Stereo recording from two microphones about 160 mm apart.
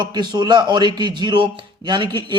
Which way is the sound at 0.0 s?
25° right (ahead or behind).